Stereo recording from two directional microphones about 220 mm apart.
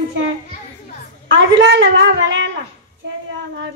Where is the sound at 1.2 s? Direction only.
55° right (ahead or behind).